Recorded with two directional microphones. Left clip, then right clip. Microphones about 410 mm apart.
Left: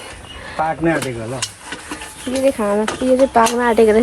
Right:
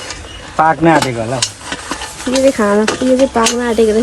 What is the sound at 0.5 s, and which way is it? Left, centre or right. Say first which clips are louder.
Speech: right 8 dB; centre.